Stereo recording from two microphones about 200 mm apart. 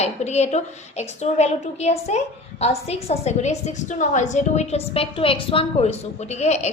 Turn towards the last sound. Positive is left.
turn(degrees=35)  # may be behind; listen again after turning